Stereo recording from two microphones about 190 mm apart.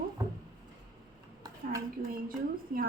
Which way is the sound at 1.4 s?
15° right (ahead or behind).